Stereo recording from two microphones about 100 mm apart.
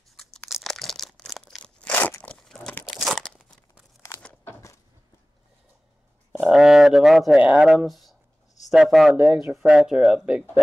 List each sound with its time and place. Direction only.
0.1 s crumpling: 5° left (ahead or behind)
0.5 s a sound: centre (ahead or behind)
1.8 s crunch: 15° left (ahead or behind)
2.9 s crumpling: centre (ahead or behind)
4.2 s crumpling: 20° left (ahead or behind)
6.4 s a sound: 5° right (ahead or behind)
8.6 s speech: centre (ahead or behind)
9.1 s speech: 10° right (ahead or behind)